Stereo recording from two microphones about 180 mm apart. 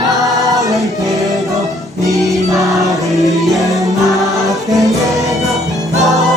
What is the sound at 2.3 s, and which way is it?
Music, centre (ahead or behind).